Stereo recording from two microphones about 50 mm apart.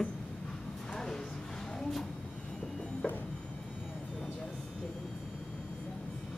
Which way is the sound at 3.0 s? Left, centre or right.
Left.